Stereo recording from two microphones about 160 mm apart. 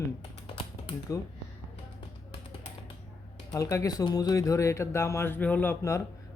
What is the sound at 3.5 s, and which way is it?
Speech, 20° left (ahead or behind).